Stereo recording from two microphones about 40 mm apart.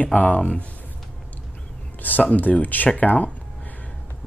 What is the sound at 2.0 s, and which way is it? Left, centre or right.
Speech, left.